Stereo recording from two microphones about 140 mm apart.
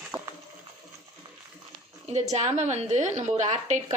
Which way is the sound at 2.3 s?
55° right (ahead or behind).